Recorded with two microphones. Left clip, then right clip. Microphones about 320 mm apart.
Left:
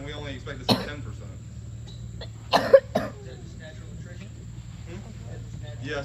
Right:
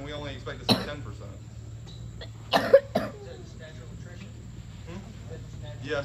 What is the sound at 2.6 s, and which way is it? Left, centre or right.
Cough, centre.